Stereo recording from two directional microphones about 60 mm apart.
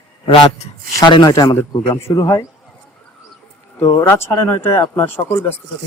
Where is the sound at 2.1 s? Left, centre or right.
Left.